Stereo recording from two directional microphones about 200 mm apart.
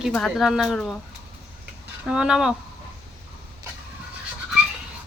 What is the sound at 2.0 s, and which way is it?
Speech, 5° right (ahead or behind).